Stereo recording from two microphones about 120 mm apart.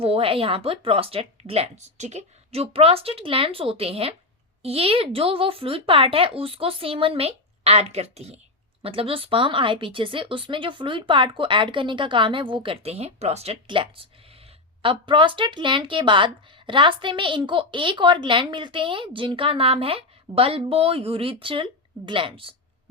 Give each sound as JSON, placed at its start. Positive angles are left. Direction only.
{"t": 0.0, "sound": "speech", "side_deg": -50}
{"t": 13.7, "sound": "speech", "side_deg": -45}